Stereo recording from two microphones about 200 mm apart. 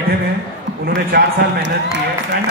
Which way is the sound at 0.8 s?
55° right (ahead or behind).